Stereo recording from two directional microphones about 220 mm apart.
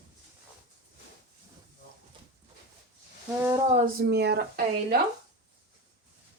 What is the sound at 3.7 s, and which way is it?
Speech, 45° right (ahead or behind).